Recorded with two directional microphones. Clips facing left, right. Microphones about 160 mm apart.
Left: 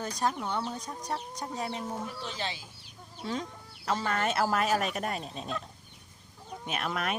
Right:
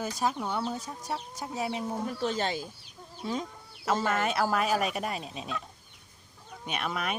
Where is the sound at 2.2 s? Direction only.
50° right (ahead or behind).